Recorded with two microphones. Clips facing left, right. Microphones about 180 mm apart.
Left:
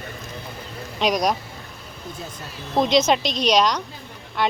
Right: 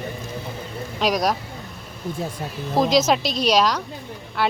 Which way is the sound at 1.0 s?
Centre (ahead or behind).